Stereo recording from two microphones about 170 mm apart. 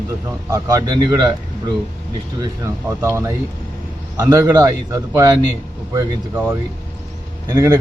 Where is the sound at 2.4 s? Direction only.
15° right (ahead or behind).